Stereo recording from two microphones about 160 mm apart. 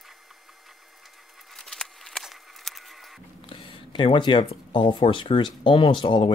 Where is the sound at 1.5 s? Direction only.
5° left (ahead or behind).